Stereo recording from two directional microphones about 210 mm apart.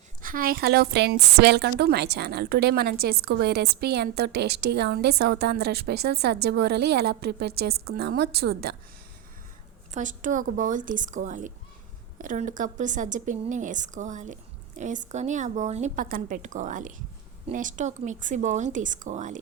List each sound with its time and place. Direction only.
0.2 s a woman's voice: 40° right (ahead or behind)
9.9 s a woman's voice: 35° right (ahead or behind)